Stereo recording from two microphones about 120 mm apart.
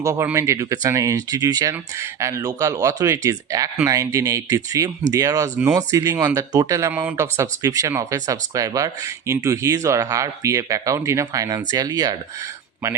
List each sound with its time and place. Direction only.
0.0 s speech: 25° right (ahead or behind)
6.9 s speech: 15° right (ahead or behind); by 12.1 s 35° right (ahead or behind)